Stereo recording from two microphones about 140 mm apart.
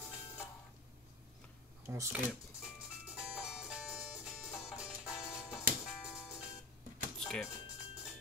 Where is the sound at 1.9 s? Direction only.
20° right (ahead or behind).